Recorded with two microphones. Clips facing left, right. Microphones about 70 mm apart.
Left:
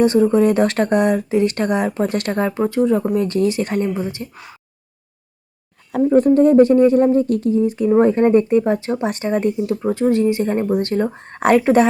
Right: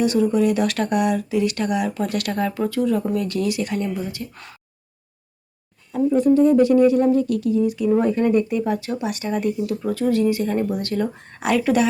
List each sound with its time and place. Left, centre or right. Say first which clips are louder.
0.0 s speech: left 5 dB; left
6.0 s speech: left 3 dB; left